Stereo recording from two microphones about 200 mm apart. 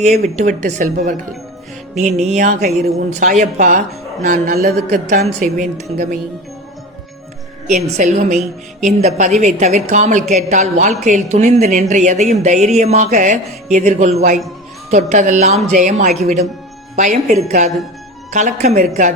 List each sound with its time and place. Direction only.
0.0 s a woman's voice: 35° right (ahead or behind)
7.7 s a woman's voice: 35° right (ahead or behind)